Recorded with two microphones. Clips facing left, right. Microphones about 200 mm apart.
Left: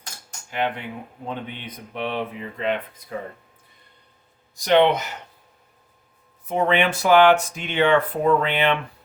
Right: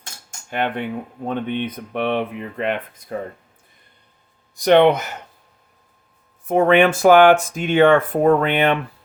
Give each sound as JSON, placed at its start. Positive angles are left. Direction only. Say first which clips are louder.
{"t": 0.5, "sound": "speech", "louder": "right 3 dB", "side_deg": -55}
{"t": 4.5, "sound": "speech", "louder": "right 4 dB", "side_deg": -55}
{"t": 6.5, "sound": "speech", "louder": "right 6 dB", "side_deg": -50}